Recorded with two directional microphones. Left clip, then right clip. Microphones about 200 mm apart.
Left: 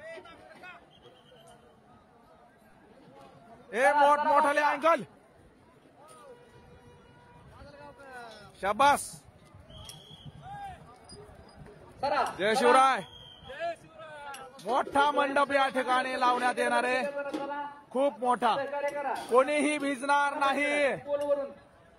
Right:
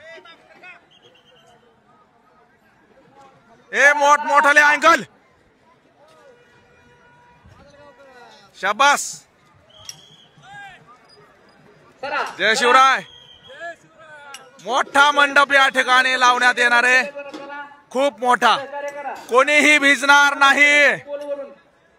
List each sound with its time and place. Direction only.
0.0 s a sound: 55° left (ahead or behind)
3.7 s speech: 5° right (ahead or behind)
8.5 s speech: centre (ahead or behind)
12.4 s speech: centre (ahead or behind)
13.7 s basketball bounce: 25° right (ahead or behind)
14.6 s a man's voice: 5° right (ahead or behind)
18.6 s a sound: 40° right (ahead or behind)
19.3 s a man's voice: 5° right (ahead or behind)